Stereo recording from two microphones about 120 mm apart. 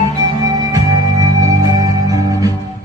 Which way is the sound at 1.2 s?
30° right (ahead or behind).